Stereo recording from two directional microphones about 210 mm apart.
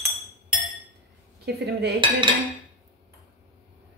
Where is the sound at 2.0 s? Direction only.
25° right (ahead or behind).